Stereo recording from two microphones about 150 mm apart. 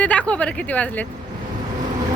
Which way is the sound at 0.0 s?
10° left (ahead or behind).